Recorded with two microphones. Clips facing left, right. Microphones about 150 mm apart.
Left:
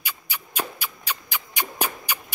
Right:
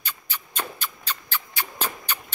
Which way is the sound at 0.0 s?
10° left (ahead or behind).